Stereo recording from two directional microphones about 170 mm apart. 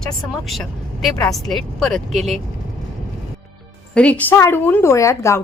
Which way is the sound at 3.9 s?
5° left (ahead or behind).